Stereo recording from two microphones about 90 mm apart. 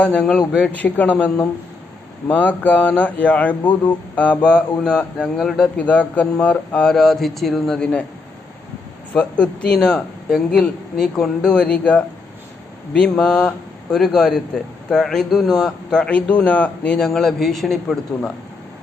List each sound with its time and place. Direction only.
0.0 s a man's voice: 10° left (ahead or behind)
5.4 s a man's voice: centre (ahead or behind)
5.7 s a man's voice: 15° left (ahead or behind)
9.1 s a man's voice: 15° left (ahead or behind)